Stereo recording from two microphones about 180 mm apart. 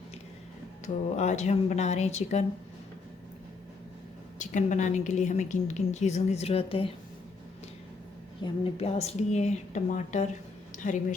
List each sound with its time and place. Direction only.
1.1 s a woman's voice: 40° left (ahead or behind)
4.4 s a woman's voice: 45° left (ahead or behind)
8.4 s a woman's voice: 35° left (ahead or behind)